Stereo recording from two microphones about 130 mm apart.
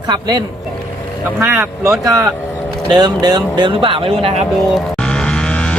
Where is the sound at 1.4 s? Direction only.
20° right (ahead or behind); by 4.3 s 45° right (ahead or behind).